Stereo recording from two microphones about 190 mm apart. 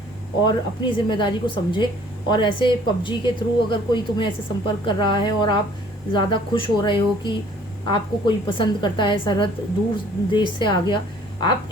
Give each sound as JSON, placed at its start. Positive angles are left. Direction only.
{"t": 0.4, "sound": "a woman's voice", "side_deg": 25}